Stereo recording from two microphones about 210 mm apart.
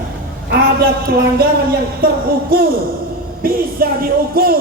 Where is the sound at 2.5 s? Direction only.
45° right (ahead or behind).